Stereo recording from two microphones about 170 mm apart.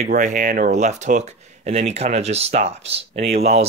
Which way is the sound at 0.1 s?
50° right (ahead or behind).